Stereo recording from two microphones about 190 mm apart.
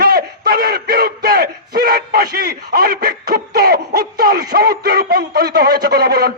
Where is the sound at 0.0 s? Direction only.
55° right (ahead or behind).